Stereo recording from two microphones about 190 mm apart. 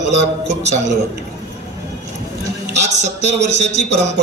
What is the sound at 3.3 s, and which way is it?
Speech, 65° right (ahead or behind).